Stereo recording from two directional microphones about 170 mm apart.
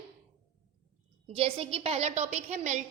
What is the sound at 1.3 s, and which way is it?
A woman's voice, 35° right (ahead or behind).